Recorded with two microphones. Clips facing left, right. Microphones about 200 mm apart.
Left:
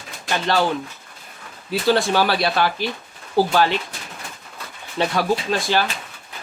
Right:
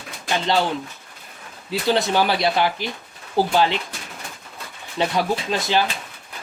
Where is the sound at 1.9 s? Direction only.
20° right (ahead or behind).